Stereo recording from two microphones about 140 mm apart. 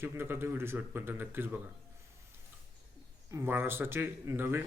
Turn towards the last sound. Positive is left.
turn(degrees=-15)  # may be behind; listen again after turning